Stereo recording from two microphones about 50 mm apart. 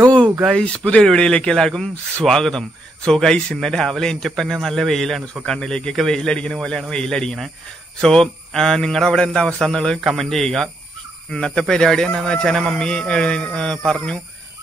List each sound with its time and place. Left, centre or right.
0.5 s speech: centre
5.2 s speech: centre
9.9 s speech: centre